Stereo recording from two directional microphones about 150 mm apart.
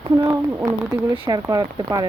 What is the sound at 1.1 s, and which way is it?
Speech, 25° right (ahead or behind).